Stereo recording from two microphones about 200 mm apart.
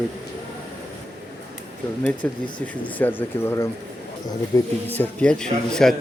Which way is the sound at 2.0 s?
5° left (ahead or behind).